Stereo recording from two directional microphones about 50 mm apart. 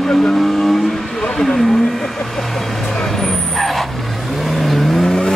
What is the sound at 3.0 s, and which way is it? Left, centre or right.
Vehicle, centre.